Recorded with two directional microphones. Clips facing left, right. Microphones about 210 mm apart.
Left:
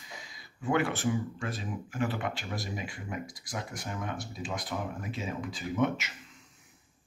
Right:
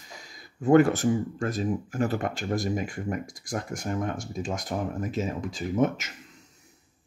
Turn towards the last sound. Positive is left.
turn(degrees=-45)  # may be behind; listen again after turning